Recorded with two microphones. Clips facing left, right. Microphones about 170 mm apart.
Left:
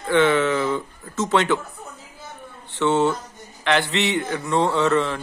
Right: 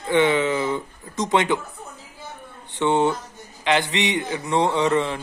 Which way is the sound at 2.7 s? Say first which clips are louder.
Even; 15° right (ahead or behind).